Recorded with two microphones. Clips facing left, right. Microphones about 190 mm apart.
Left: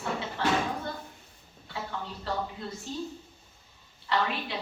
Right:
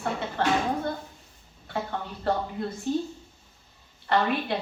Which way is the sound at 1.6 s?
55° right (ahead or behind).